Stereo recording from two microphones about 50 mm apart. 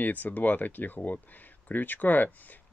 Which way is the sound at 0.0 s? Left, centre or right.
Left.